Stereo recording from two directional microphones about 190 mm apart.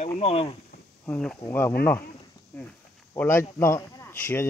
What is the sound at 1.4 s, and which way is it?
Speech, 10° left (ahead or behind).